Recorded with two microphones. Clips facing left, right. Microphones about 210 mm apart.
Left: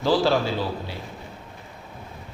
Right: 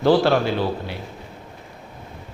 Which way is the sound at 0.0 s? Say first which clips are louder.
Right 4 dB; 60° right (ahead or behind).